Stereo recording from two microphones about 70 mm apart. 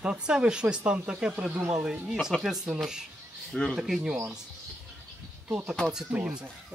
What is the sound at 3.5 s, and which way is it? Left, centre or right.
Speech, centre.